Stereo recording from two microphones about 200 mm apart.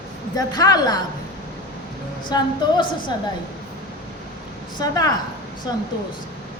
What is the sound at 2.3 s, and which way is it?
Speech, 20° left (ahead or behind).